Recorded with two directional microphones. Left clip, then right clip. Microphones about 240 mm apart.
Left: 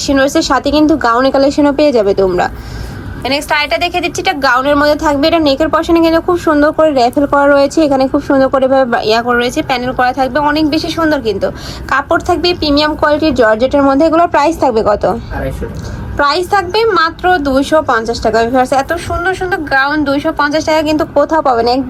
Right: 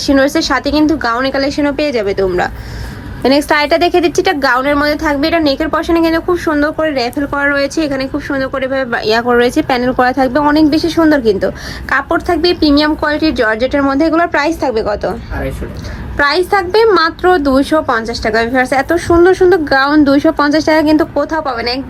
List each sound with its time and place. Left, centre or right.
0.0 s a woman's voice: centre
3.6 s a woman's voice: right